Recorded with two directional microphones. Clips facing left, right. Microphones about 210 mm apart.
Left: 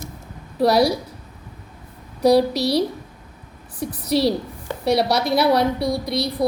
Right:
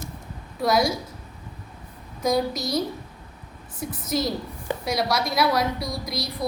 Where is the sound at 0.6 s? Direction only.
35° left (ahead or behind).